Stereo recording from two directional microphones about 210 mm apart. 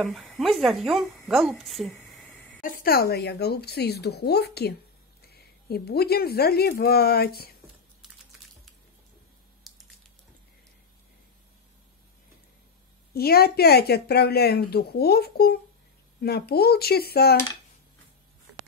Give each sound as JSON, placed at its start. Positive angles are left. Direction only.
{"t": 0.0, "sound": "a woman's voice", "side_deg": 0}
{"t": 2.6, "sound": "speech", "side_deg": 45}
{"t": 9.6, "sound": "a sound", "side_deg": 0}
{"t": 13.1, "sound": "speech", "side_deg": 45}